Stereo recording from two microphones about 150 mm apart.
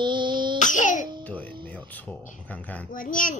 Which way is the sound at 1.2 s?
10° left (ahead or behind).